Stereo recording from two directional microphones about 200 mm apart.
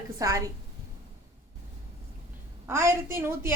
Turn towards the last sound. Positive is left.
turn(degrees=-10)  # may be behind; listen again after turning